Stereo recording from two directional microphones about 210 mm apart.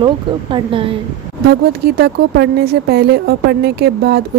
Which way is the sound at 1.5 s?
50° right (ahead or behind).